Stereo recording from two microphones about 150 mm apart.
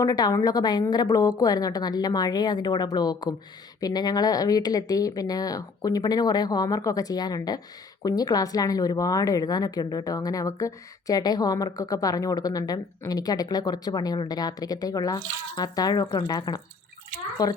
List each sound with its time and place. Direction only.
0.0 s a woman's voice: 25° left (ahead or behind)